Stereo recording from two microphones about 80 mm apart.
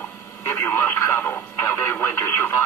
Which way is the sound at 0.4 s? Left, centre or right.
Left.